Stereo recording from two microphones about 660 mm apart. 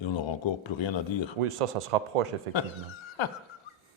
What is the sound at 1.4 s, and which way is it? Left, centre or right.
Speech, right.